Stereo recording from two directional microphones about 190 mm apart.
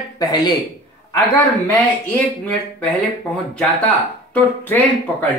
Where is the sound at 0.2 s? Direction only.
20° left (ahead or behind).